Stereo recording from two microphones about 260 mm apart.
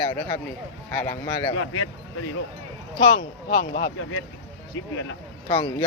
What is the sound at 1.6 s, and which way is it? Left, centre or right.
Speech, left.